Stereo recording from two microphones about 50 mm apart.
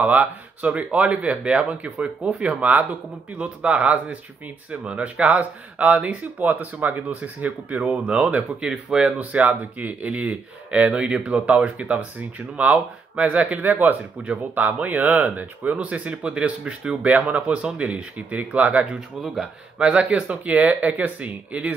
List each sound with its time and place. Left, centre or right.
0.0 s speech: right